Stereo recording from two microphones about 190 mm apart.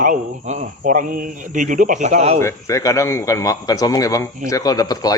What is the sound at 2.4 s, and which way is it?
A man's voice, 15° left (ahead or behind).